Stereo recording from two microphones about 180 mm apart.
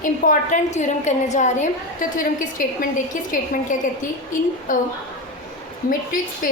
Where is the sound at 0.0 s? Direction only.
45° left (ahead or behind).